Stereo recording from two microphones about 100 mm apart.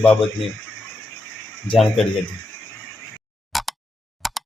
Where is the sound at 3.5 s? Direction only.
Centre (ahead or behind).